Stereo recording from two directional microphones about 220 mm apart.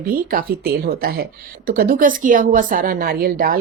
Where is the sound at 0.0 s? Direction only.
40° right (ahead or behind).